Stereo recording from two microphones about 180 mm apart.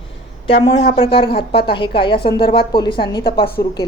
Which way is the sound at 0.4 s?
30° left (ahead or behind).